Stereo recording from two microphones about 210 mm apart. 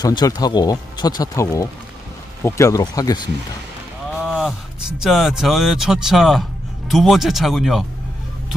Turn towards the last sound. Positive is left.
turn(degrees=0)  # may be behind; listen again after turning